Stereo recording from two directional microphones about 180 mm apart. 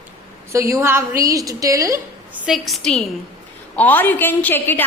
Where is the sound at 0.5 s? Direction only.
15° right (ahead or behind).